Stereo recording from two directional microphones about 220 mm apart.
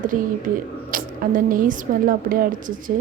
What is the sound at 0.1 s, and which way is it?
A woman's voice, 40° right (ahead or behind).